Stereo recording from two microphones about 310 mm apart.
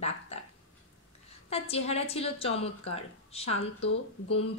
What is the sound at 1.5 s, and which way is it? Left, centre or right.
Speech, centre.